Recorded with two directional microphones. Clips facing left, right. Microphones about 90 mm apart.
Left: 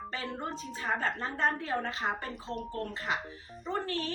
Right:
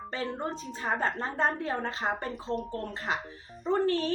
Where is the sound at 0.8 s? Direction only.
30° right (ahead or behind).